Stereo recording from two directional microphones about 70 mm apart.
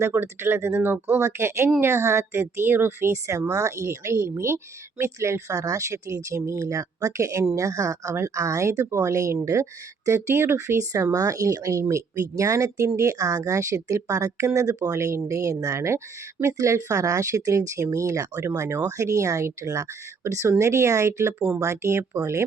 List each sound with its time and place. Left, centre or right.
0.0 s speech: right